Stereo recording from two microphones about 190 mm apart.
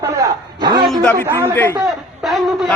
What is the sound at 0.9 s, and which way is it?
Speech, 5° left (ahead or behind).